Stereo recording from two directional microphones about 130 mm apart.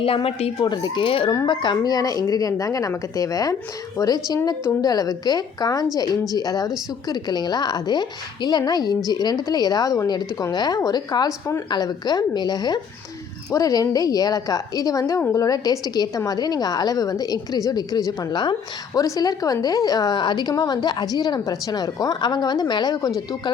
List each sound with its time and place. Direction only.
0.0 s speech: 45° left (ahead or behind)
0.6 s a woman's voice: 35° left (ahead or behind)
1.3 s a woman's voice: 30° left (ahead or behind)